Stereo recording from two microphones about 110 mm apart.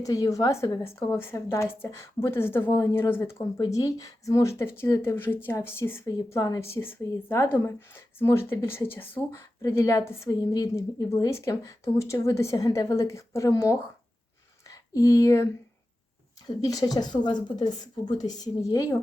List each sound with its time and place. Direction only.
0.0 s a woman's voice: 30° left (ahead or behind)
3.7 s a woman's voice: 35° left (ahead or behind)
16.6 s speech: 35° left (ahead or behind)